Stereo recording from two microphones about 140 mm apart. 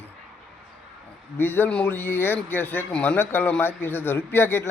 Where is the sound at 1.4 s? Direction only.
15° left (ahead or behind).